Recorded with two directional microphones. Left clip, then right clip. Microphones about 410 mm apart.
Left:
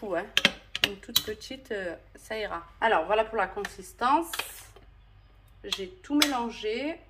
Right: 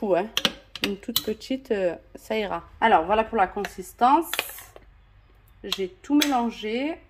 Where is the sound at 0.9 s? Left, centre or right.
Centre.